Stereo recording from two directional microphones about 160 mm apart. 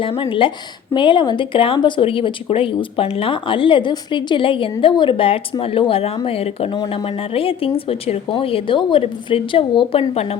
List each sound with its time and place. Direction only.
0.0 s speech: 35° left (ahead or behind)